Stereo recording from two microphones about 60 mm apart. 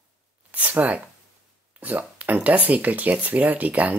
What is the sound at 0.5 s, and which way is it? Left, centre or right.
Speech, right.